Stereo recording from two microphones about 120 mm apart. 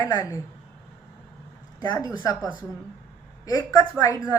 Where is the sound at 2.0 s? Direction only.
30° left (ahead or behind).